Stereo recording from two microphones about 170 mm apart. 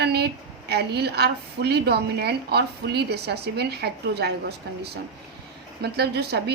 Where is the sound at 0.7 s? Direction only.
75° right (ahead or behind).